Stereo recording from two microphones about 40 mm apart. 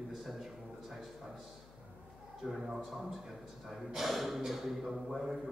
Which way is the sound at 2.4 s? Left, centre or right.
Centre.